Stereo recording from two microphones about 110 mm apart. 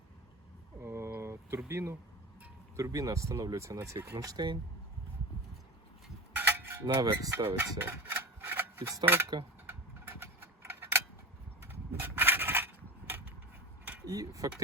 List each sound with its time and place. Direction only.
0.8 s a sound: 25° right (ahead or behind)
1.6 s speech: 25° right (ahead or behind)
6.3 s a sound: 20° right (ahead or behind)
6.8 s speech: 40° right (ahead or behind); by 9.3 s 20° right (ahead or behind)
9.6 s tick-tock: 20° right (ahead or behind)
11.6 s mechanisms: 20° right (ahead or behind)
14.1 s speech: 30° right (ahead or behind)